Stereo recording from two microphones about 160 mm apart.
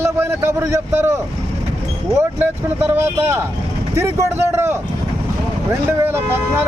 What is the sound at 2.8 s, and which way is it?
Speech, 15° right (ahead or behind).